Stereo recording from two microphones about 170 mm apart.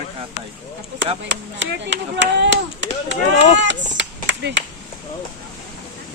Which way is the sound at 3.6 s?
90° right.